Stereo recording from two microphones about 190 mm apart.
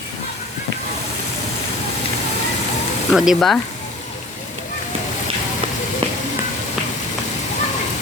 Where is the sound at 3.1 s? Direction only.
Centre (ahead or behind).